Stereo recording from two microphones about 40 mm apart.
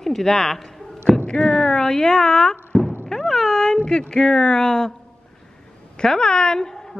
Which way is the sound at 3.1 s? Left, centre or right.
Centre.